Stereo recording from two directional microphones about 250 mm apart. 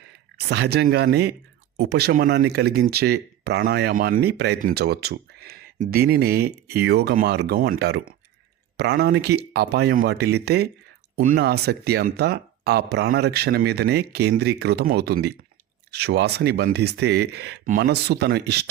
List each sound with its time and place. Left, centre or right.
0.3 s speech: right